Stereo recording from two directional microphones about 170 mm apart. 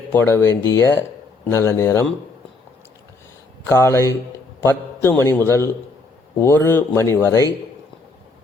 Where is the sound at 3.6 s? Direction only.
15° left (ahead or behind).